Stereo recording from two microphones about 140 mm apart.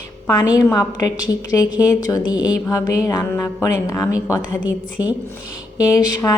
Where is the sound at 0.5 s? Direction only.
25° left (ahead or behind).